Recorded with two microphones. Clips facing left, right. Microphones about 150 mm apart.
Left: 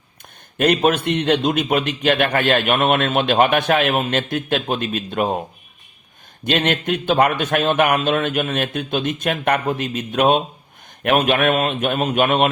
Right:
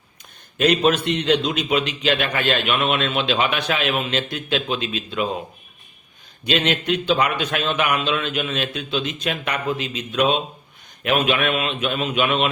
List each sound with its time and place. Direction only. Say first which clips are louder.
0.6 s a man's voice: left 1 dB; 55° left (ahead or behind)
6.4 s a man's voice: left 2 dB; 50° left (ahead or behind)